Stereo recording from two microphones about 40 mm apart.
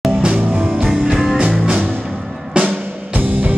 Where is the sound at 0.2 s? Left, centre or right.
Right.